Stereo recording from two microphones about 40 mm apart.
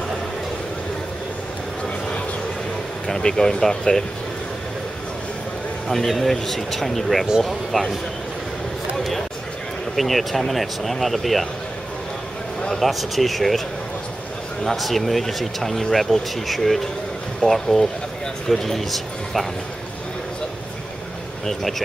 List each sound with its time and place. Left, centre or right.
3.1 s speech: centre
5.9 s speech: centre
8.9 s a sound: centre
9.9 s speech: centre
12.7 s speech: centre
14.8 s a man's voice: centre
21.5 s speech: centre